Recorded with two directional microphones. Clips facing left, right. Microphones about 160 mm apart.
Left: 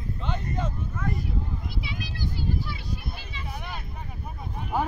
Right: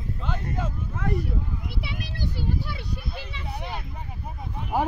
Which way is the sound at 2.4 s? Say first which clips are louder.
Even; 60° right (ahead or behind).